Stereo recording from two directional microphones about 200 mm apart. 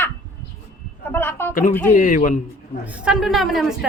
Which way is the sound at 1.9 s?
40° left (ahead or behind).